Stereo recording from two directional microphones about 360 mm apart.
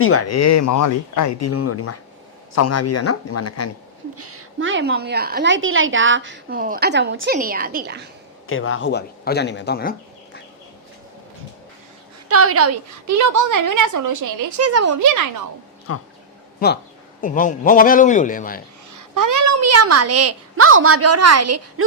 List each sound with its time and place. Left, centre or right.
0.0 s speech: left
4.2 s a woman's voice: right
8.4 s speech: left
12.3 s a child's voice: right
15.9 s speech: left
16.6 s speech: left
18.9 s a child's voice: right